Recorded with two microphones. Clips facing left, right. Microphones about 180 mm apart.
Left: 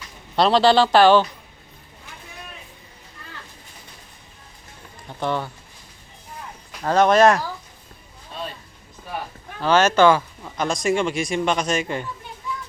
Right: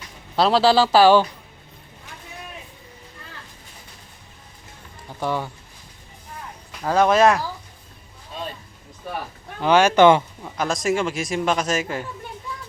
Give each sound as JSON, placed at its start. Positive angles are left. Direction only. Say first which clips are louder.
{"t": 0.3, "sound": "a man's voice", "louder": "left 1 dB", "side_deg": -5}
{"t": 5.2, "sound": "speech", "louder": "even", "side_deg": -10}
{"t": 6.8, "sound": "a man's voice", "louder": "left 1 dB", "side_deg": -5}
{"t": 9.6, "sound": "speech", "louder": "right 1 dB", "side_deg": -15}
{"t": 10.4, "sound": "a man's voice", "louder": "even", "side_deg": -5}